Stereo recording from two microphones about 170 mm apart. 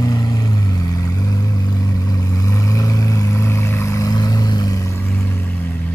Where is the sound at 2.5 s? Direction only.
20° left (ahead or behind).